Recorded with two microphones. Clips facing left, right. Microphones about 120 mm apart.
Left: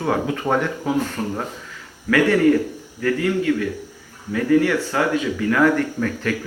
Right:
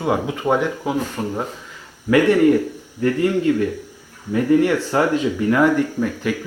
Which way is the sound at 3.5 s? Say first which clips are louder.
Right 2 dB; 20° right (ahead or behind).